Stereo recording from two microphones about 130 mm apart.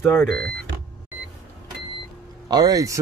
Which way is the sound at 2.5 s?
30° right (ahead or behind).